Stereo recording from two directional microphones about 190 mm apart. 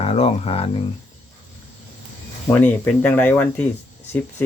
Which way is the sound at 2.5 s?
10° left (ahead or behind).